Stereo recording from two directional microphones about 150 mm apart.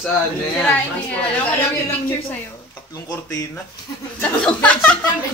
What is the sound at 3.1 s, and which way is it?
Speech, 25° left (ahead or behind).